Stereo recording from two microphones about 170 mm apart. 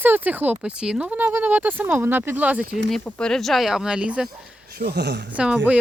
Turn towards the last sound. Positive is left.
turn(degrees=-5)  # may be behind; listen again after turning